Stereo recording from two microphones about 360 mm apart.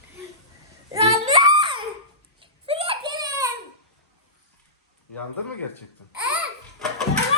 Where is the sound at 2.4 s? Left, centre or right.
Centre.